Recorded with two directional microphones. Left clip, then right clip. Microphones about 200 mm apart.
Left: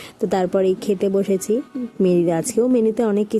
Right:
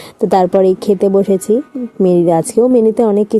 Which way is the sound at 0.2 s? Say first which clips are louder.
Right 9 dB; 15° right (ahead or behind).